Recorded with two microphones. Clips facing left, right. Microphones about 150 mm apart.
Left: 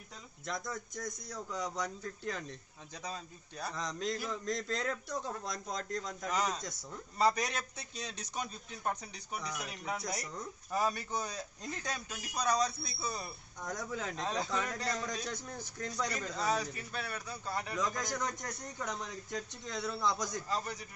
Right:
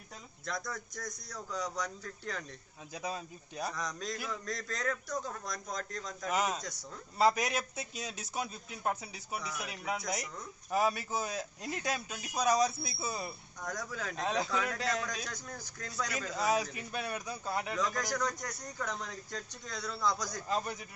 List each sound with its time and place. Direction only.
0.5 s a man's voice: 20° left (ahead or behind)
2.9 s a man's voice: 10° right (ahead or behind)
3.7 s a man's voice: 25° left (ahead or behind)
6.3 s a man's voice: 10° right (ahead or behind)
13.7 s a man's voice: 25° left (ahead or behind)
14.2 s a man's voice: 10° right (ahead or behind)
15.2 s a man's voice: 25° left (ahead or behind)
16.3 s a man's voice: 10° right (ahead or behind)
17.7 s a man's voice: 20° left (ahead or behind)
20.4 s a man's voice: 20° right (ahead or behind)